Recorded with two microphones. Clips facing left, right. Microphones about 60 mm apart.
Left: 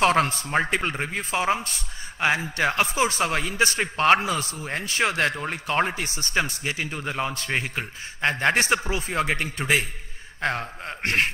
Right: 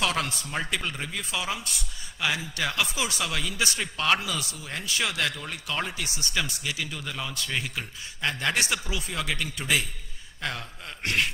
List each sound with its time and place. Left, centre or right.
0.0 s a man's voice: left